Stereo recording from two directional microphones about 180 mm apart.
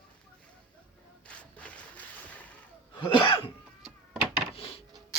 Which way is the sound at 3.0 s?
25° left (ahead or behind).